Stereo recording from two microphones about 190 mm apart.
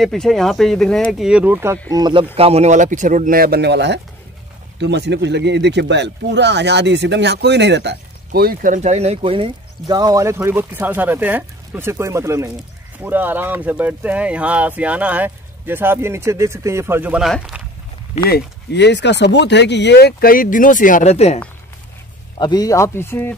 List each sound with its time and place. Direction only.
0.0 s speech: centre (ahead or behind); by 2.2 s 20° right (ahead or behind)
2.3 s speech: 30° right (ahead or behind); by 17.6 s 5° right (ahead or behind)
18.3 s speech: 65° left (ahead or behind); by 21.4 s 35° left (ahead or behind)
22.4 s speech: 20° left (ahead or behind)